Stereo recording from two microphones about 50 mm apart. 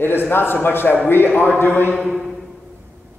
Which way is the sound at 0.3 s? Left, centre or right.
Left.